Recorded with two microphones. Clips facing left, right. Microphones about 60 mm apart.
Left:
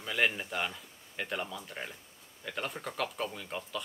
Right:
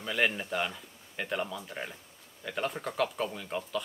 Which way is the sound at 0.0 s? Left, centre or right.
Centre.